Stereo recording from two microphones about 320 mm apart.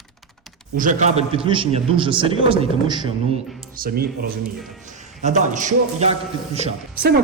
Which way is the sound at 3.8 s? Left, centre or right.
Right.